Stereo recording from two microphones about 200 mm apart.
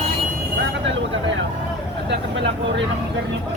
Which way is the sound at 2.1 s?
65° right (ahead or behind).